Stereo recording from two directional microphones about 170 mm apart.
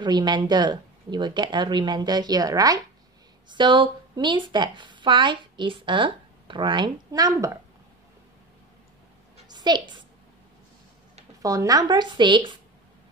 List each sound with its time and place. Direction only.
0.0 s speech: 25° right (ahead or behind)
9.5 s a woman's voice: 25° right (ahead or behind)
11.4 s speech: 20° right (ahead or behind)